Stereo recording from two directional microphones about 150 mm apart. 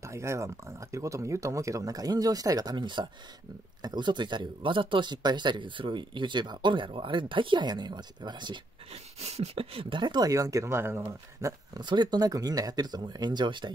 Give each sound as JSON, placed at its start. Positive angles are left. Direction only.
{"t": 0.0, "sound": "speech", "side_deg": -20}
{"t": 9.2, "sound": "speech", "side_deg": -45}